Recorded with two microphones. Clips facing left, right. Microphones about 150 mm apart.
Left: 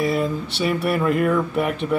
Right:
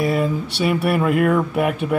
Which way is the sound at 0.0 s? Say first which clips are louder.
Right 2 dB; 5° right (ahead or behind).